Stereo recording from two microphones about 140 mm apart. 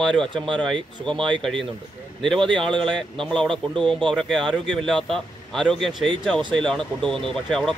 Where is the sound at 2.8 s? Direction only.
5° left (ahead or behind).